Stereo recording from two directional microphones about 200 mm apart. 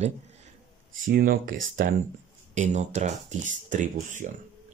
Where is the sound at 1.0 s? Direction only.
45° right (ahead or behind).